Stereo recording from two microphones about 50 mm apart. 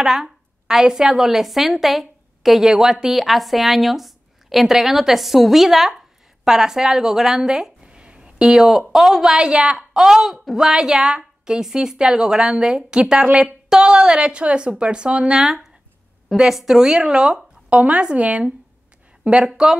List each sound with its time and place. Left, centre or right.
0.0 s a woman's voice: centre
7.9 s a woman's voice: right
15.3 s a woman's voice: centre